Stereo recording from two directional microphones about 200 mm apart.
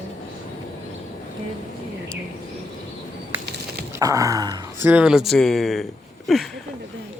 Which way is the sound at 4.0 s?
15° right (ahead or behind).